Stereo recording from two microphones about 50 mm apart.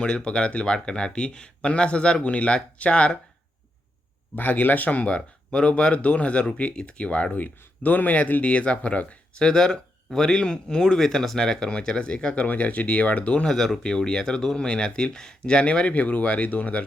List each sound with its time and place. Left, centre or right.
0.0 s speech: centre
4.4 s speech: left
9.4 s speech: centre
13.4 s speech: centre; by 16.8 s left